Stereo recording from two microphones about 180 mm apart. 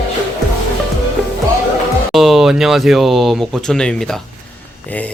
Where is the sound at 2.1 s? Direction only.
Centre (ahead or behind).